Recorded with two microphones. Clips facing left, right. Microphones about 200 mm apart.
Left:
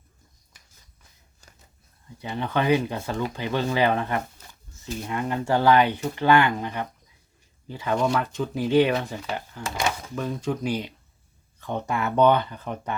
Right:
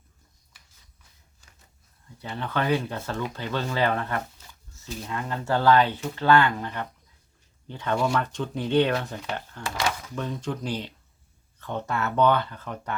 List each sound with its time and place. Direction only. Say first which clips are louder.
2.2 s speech: left 3 dB; 15° left (ahead or behind)